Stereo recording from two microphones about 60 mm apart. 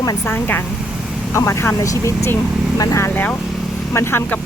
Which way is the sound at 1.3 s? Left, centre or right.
Left.